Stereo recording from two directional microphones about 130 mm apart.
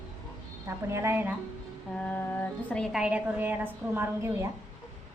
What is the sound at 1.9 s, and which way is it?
Mantra, 10° left (ahead or behind).